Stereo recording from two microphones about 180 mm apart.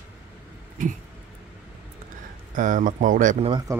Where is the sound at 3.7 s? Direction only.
15° right (ahead or behind).